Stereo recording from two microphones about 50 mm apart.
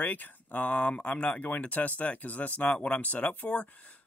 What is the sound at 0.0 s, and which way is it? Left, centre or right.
Speech, left.